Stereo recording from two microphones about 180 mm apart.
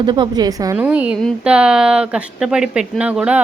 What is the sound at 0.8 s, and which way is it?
Speech, 5° right (ahead or behind).